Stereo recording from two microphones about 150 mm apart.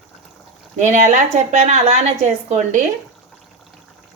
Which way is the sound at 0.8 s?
55° right (ahead or behind).